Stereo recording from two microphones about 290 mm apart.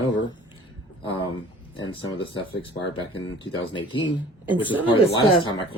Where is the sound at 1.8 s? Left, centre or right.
Centre.